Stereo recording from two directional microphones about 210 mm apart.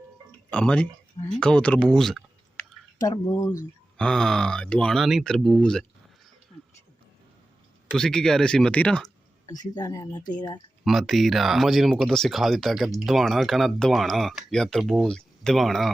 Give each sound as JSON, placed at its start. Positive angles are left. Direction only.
{"t": 0.3, "sound": "music", "side_deg": 5}
{"t": 1.3, "sound": "speech", "side_deg": 5}
{"t": 3.0, "sound": "speech", "side_deg": 15}
{"t": 3.9, "sound": "speech", "side_deg": 5}
{"t": 7.9, "sound": "speech", "side_deg": 5}
{"t": 9.5, "sound": "speech", "side_deg": 20}
{"t": 10.8, "sound": "speech", "side_deg": 0}